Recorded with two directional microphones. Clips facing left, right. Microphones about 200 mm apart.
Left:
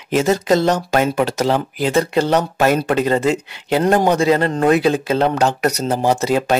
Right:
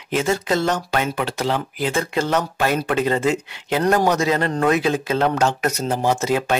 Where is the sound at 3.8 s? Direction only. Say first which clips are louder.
Left 3 dB; 25° left (ahead or behind).